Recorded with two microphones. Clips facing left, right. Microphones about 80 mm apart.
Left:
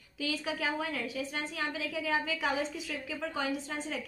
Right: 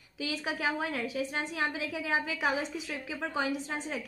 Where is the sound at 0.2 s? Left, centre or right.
Right.